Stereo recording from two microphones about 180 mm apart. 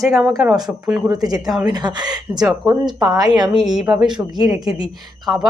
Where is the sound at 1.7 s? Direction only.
25° right (ahead or behind).